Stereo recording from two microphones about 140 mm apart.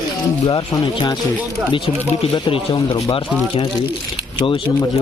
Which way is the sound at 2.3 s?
40° left (ahead or behind).